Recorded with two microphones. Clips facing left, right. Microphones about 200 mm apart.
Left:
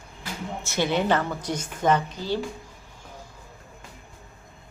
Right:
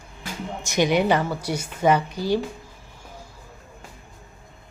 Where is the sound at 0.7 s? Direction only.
15° right (ahead or behind).